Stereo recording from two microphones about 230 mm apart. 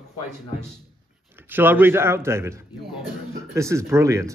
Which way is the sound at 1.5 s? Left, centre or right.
Centre.